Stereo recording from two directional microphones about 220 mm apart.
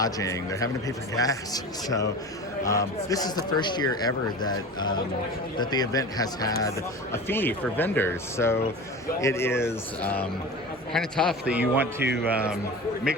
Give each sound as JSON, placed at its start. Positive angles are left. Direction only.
{"t": 0.0, "sound": "speech", "side_deg": 15}
{"t": 5.5, "sound": "a man's voice", "side_deg": 20}